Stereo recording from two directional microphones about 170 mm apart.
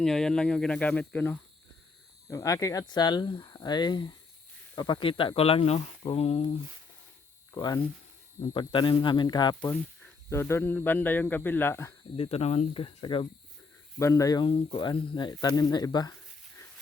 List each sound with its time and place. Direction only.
0.0 s speech: 5° left (ahead or behind); by 6.6 s 35° left (ahead or behind)
7.5 s speech: 25° left (ahead or behind)
10.2 s speech: 15° left (ahead or behind)
12.1 s speech: 35° left (ahead or behind)
14.0 s speech: 20° left (ahead or behind)